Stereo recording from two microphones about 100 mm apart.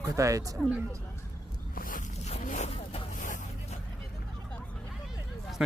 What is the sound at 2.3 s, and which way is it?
Boat, 90° left.